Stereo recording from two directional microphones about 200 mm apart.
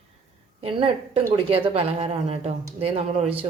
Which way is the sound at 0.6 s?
25° right (ahead or behind).